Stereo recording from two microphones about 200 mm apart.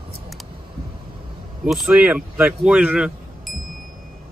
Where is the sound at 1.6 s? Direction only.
Centre (ahead or behind).